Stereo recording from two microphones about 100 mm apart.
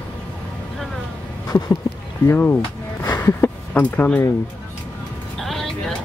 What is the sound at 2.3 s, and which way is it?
Speech, 25° left (ahead or behind).